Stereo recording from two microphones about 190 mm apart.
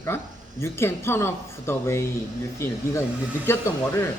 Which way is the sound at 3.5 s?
15° left (ahead or behind).